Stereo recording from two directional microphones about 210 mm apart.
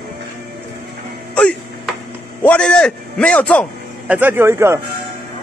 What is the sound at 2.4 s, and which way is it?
A man's voice, 5° left (ahead or behind).